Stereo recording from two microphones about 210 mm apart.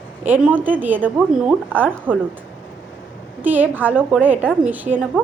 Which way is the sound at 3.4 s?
10° right (ahead or behind).